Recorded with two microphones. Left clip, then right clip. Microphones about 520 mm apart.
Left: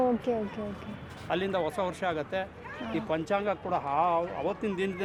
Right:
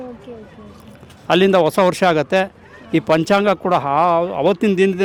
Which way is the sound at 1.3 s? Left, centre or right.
Right.